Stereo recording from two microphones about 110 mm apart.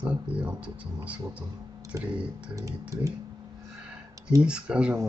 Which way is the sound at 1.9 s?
30° right (ahead or behind).